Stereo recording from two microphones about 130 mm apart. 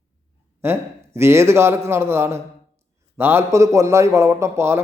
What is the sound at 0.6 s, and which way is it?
A man's voice, 20° right (ahead or behind).